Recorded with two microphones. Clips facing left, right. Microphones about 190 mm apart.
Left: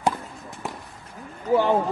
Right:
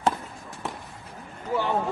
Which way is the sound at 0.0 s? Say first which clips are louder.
Left 1 dB; 15° left (ahead or behind).